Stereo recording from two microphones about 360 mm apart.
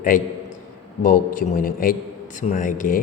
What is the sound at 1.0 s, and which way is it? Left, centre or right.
A man's voice, left.